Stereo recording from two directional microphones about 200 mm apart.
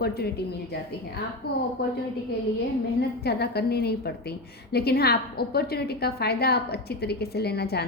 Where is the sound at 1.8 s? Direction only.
55° left (ahead or behind).